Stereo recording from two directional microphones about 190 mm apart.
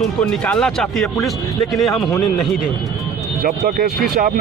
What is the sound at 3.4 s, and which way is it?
Speech, 50° right (ahead or behind).